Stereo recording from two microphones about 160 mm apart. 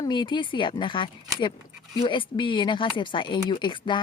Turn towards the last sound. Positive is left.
turn(degrees=30)  # may be behind; listen again after turning